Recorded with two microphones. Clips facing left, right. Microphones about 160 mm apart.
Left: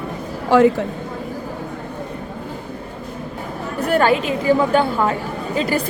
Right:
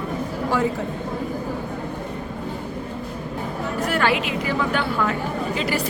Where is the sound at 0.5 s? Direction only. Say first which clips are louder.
Left 10 dB; 90° left.